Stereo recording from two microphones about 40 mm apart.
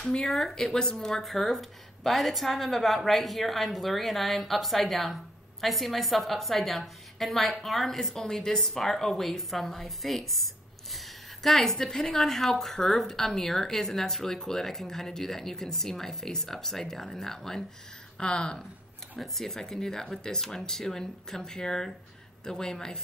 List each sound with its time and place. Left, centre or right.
0.0 s a woman's voice: centre
18.1 s speech: left
19.1 s a woman's voice: centre